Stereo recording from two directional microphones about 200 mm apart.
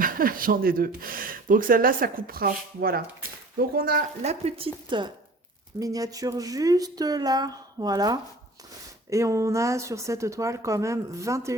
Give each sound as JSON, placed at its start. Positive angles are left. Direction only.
{"t": 0.0, "sound": "speech", "side_deg": -45}
{"t": 4.2, "sound": "speech", "side_deg": -30}